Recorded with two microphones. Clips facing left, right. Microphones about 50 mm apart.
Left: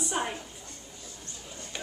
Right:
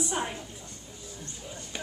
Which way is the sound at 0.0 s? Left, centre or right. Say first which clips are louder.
Even; centre.